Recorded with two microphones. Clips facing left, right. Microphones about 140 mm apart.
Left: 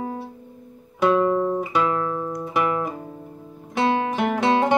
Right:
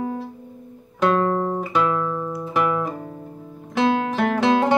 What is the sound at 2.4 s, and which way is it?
Guitar, 10° left (ahead or behind).